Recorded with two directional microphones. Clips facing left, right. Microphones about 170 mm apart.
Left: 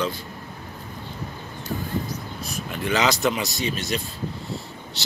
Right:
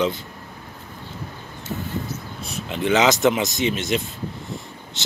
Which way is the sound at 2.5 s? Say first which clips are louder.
Right 5 dB; 20° right (ahead or behind).